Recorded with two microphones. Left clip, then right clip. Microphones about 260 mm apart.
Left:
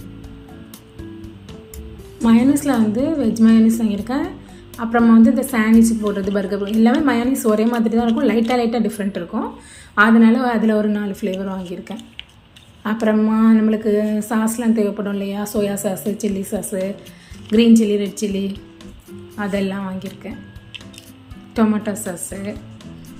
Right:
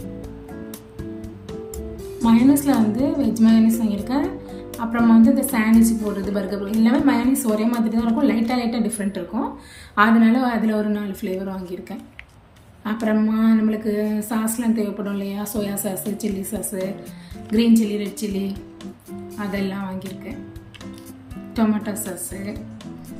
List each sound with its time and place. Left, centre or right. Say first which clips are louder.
2.2 s a woman's voice: left 1 dB; centre
12.8 s a woman's voice: left 4 dB; centre
21.5 s a woman's voice: left 4 dB; centre